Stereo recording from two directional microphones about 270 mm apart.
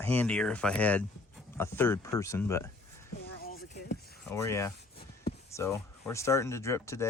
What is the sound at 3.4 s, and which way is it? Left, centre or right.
Vehicle, left.